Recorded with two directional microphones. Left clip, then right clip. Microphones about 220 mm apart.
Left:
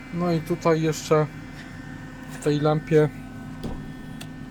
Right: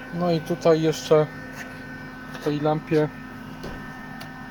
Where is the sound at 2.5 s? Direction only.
30° left (ahead or behind).